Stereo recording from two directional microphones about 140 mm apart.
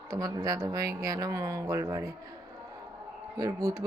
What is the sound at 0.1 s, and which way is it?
Speech, 25° right (ahead or behind).